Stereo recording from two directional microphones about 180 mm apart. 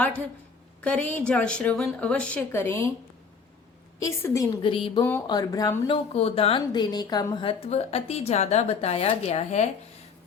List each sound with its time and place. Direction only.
0.8 s speech: 5° left (ahead or behind)
4.0 s speech: 15° left (ahead or behind)
4.6 s speech: 30° left (ahead or behind)
5.9 s a woman's voice: 30° left (ahead or behind)